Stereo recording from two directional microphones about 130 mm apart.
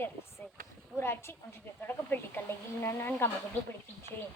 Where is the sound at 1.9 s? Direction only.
15° left (ahead or behind).